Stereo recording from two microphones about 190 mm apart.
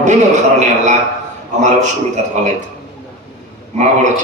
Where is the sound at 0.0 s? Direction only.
40° right (ahead or behind).